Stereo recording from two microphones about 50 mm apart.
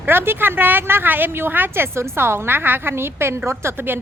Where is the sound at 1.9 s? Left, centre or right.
Right.